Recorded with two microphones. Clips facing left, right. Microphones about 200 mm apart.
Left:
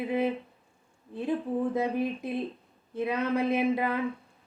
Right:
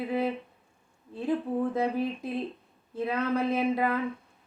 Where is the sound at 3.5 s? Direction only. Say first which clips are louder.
Even; 15° left (ahead or behind).